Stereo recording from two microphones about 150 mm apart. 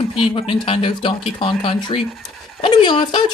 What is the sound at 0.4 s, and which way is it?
Speech, 40° left (ahead or behind).